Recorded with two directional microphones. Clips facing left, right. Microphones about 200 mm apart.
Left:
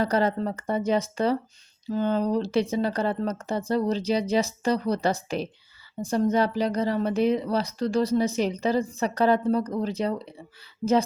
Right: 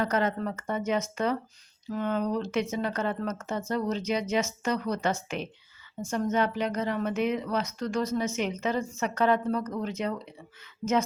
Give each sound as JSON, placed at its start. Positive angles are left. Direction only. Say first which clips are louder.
{"t": 0.0, "sound": "speech", "louder": "left 4 dB", "side_deg": 35}